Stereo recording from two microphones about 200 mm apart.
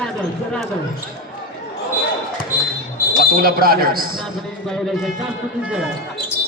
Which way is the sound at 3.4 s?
50° right (ahead or behind).